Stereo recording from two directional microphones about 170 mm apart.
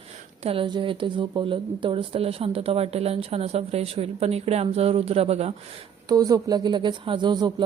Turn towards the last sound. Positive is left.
turn(degrees=-25)  # may be behind; listen again after turning